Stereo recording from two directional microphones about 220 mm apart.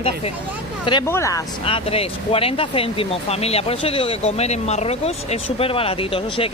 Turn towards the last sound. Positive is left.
turn(degrees=25)  # may be behind; listen again after turning